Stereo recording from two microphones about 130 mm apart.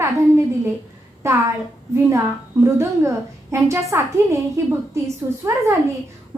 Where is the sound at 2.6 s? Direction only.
20° right (ahead or behind).